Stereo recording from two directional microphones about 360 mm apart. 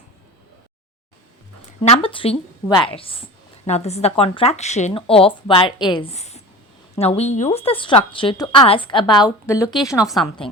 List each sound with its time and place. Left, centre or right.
1.8 s a woman's voice: centre